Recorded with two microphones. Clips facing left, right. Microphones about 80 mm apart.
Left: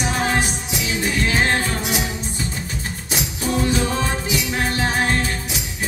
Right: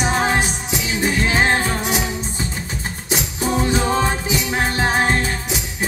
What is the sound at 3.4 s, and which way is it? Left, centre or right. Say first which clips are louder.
Music: right 2 dB; right.